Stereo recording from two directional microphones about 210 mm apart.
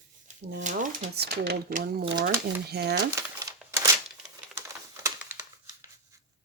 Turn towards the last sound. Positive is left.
turn(degrees=-15)  # may be behind; listen again after turning